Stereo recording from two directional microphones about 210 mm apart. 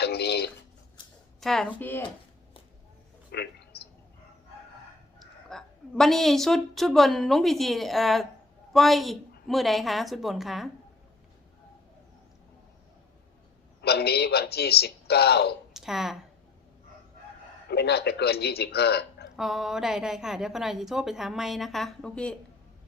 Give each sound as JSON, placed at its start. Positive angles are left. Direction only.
{"t": 0.0, "sound": "speech", "side_deg": 50}
{"t": 1.4, "sound": "a woman's voice", "side_deg": 0}
{"t": 3.3, "sound": "a sound", "side_deg": 50}
{"t": 5.2, "sound": "a woman's voice", "side_deg": 0}
{"t": 13.8, "sound": "a man's voice", "side_deg": 50}
{"t": 15.7, "sound": "a sound", "side_deg": 0}
{"t": 17.7, "sound": "a man's voice", "side_deg": 50}
{"t": 19.4, "sound": "a woman's voice", "side_deg": 0}